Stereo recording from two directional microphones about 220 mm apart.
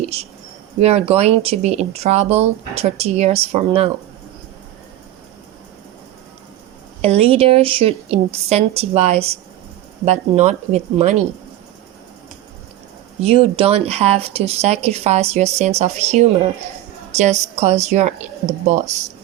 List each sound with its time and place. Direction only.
0.0 s speech: 25° right (ahead or behind)
7.0 s a woman's voice: 25° right (ahead or behind)
13.1 s a woman's voice: 25° right (ahead or behind)